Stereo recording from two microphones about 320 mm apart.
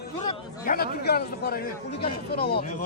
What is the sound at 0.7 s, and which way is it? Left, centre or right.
Speech, left.